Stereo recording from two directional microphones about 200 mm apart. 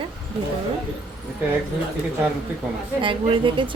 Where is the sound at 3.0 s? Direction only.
25° right (ahead or behind).